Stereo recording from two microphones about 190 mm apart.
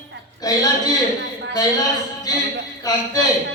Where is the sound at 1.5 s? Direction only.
20° left (ahead or behind).